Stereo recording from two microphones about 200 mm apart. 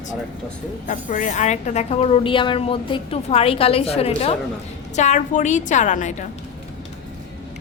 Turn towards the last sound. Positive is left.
turn(degrees=40)  # may be behind; listen again after turning